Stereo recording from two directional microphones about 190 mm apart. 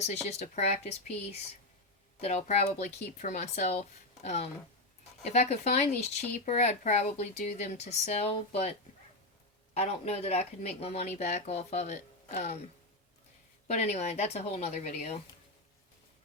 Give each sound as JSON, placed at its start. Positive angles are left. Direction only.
{"t": 0.0, "sound": "speech", "side_deg": 35}
{"t": 2.2, "sound": "speech", "side_deg": 35}
{"t": 9.7, "sound": "speech", "side_deg": 35}
{"t": 13.7, "sound": "speech", "side_deg": 35}